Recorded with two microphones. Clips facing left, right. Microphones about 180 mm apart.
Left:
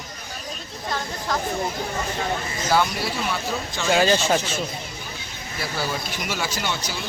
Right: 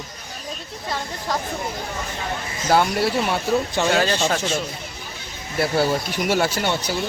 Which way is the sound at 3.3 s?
65° right (ahead or behind).